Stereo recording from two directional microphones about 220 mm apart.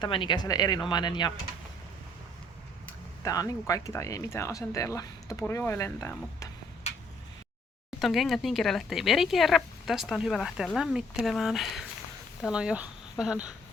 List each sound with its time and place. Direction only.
0.0 s speech: 20° left (ahead or behind)
2.8 s speech: 15° left (ahead or behind)
7.9 s speech: centre (ahead or behind)